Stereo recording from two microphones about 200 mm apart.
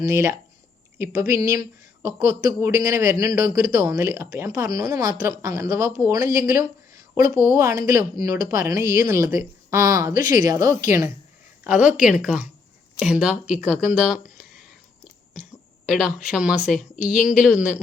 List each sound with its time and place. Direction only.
0.0 s a man's voice: 15° right (ahead or behind)
10.2 s a woman's voice: 40° left (ahead or behind)
10.4 s a man's voice: 15° right (ahead or behind)
10.7 s a woman's voice: 40° left (ahead or behind)
11.6 s speech: 5° right (ahead or behind)
15.9 s speech: 5° right (ahead or behind)